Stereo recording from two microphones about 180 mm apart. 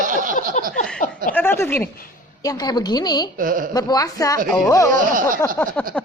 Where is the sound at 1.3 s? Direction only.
10° left (ahead or behind).